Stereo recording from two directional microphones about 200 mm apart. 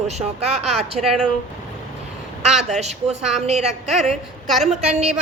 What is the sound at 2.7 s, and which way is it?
Speech, 35° right (ahead or behind).